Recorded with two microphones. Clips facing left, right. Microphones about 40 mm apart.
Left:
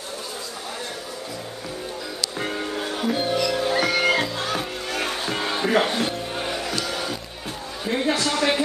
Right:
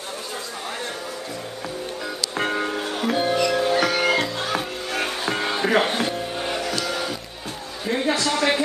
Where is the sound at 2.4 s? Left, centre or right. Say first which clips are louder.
Right 5 dB; right.